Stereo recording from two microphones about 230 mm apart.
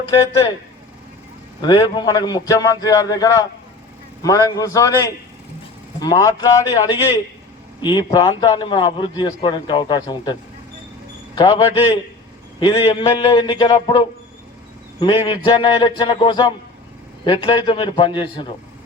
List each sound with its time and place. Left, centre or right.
1.6 s a man's voice: centre
11.3 s a man's voice: centre
15.0 s a man's voice: left